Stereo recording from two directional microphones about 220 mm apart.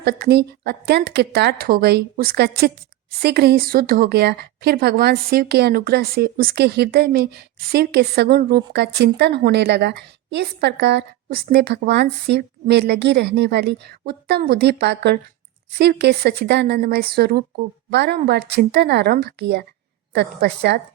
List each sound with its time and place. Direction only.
0.0 s a woman's voice: 45° right (ahead or behind)